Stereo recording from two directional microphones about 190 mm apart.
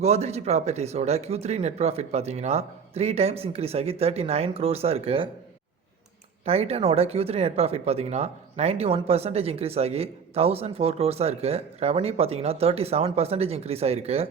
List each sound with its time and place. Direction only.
0.0 s speech: 35° right (ahead or behind)
6.4 s speech: 35° right (ahead or behind)